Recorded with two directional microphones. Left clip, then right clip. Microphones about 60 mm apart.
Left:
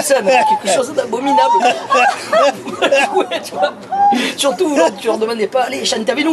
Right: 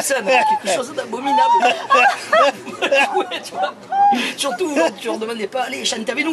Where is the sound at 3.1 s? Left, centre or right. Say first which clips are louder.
Left 4 dB; centre.